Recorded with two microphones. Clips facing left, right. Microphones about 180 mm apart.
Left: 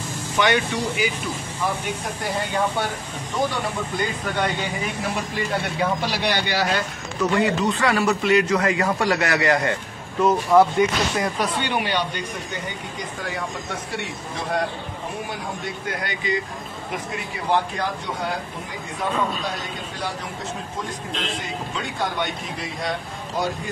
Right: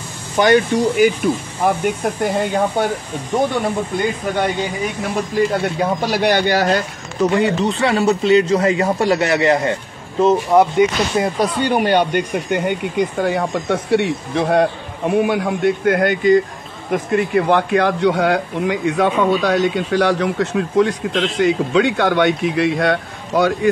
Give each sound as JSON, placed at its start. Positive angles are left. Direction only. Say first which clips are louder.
{"t": 0.4, "sound": "speech", "louder": "right 8 dB", "side_deg": -45}
{"t": 5.8, "sound": "speech", "louder": "right 4 dB", "side_deg": -45}
{"t": 7.2, "sound": "speech", "louder": "right 5 dB", "side_deg": -25}
{"t": 11.6, "sound": "a man's voice", "louder": "right 9 dB", "side_deg": -45}